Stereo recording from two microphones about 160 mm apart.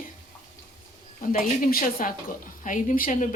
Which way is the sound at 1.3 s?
60° left (ahead or behind).